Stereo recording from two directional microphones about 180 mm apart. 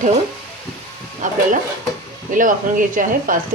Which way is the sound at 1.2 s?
45° right (ahead or behind).